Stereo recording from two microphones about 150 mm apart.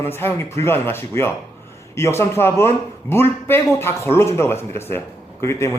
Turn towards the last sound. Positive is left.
turn(degrees=20)  # may be behind; listen again after turning